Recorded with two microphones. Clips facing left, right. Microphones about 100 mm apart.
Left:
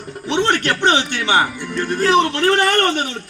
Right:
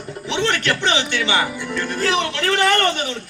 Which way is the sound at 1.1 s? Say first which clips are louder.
Left 3 dB; 45° left (ahead or behind).